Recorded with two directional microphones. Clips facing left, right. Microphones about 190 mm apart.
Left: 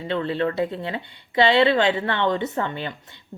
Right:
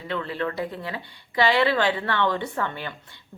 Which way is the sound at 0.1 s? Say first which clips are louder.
Left 5 dB; 25° left (ahead or behind).